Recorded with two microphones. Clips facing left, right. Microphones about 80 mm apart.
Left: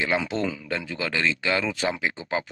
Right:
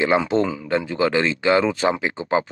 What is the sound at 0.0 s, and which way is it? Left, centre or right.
Speech, centre.